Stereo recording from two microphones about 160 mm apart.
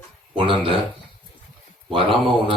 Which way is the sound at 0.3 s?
35° right (ahead or behind).